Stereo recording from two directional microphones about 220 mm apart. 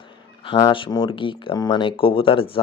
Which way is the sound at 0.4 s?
25° left (ahead or behind).